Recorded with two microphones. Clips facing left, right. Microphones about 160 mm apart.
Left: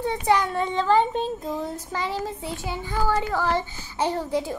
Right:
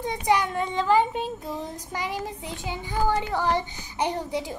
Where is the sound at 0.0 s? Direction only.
15° right (ahead or behind).